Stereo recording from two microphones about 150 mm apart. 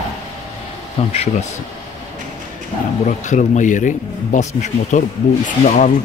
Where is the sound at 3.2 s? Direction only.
55° left (ahead or behind).